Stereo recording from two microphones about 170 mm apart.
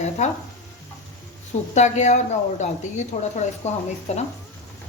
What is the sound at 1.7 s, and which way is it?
Speech, 45° left (ahead or behind).